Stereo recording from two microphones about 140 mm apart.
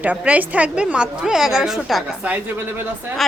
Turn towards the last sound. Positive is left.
turn(degrees=0)  # may be behind; listen again after turning